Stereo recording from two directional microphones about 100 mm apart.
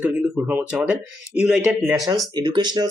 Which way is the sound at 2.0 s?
40° right (ahead or behind).